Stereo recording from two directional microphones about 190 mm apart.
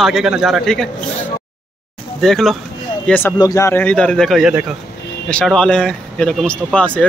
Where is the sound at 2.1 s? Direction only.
Centre (ahead or behind).